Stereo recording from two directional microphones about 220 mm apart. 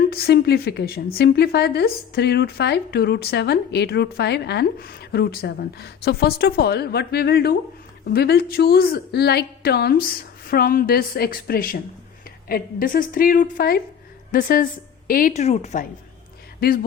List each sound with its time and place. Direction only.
0.1 s a woman's voice: 45° left (ahead or behind)